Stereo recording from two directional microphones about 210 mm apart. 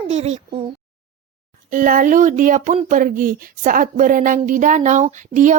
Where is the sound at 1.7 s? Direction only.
40° right (ahead or behind).